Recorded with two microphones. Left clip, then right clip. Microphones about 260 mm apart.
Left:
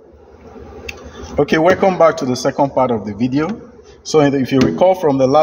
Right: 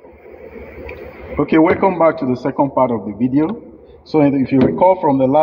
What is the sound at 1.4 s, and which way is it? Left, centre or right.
A man's voice, left.